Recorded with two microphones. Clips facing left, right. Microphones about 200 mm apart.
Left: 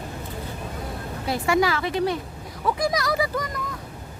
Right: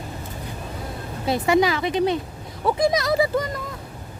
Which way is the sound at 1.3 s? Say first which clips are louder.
Right 3 dB; 20° right (ahead or behind).